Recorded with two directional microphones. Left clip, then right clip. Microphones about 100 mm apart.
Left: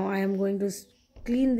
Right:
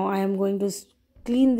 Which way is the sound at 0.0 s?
40° right (ahead or behind).